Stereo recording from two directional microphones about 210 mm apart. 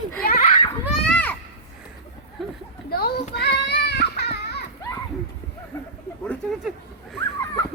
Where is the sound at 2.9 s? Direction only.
45° left (ahead or behind).